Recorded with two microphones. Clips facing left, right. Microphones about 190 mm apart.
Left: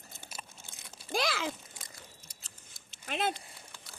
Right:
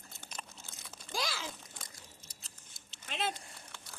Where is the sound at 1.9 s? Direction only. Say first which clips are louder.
Left 2 dB; 60° left (ahead or behind).